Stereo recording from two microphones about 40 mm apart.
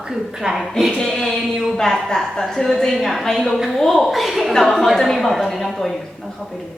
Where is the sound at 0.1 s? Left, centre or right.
Centre.